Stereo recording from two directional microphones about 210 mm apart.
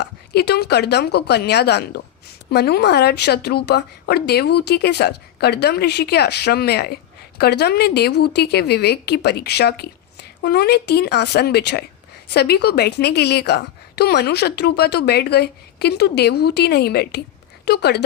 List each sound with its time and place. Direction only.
0.0 s speech: 50° left (ahead or behind)